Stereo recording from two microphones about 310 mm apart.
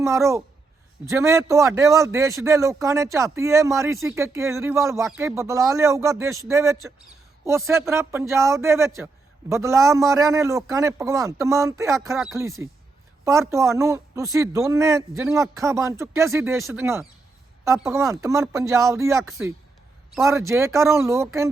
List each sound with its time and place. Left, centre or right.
0.0 s a man's voice: centre